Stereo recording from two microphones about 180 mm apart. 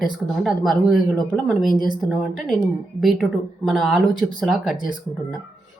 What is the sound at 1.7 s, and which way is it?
Speech, 50° left (ahead or behind).